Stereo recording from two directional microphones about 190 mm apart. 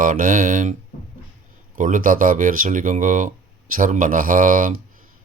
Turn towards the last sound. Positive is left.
turn(degrees=-45)  # may be behind; listen again after turning